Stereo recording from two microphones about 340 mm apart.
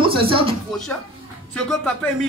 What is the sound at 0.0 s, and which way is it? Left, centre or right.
Speech, centre.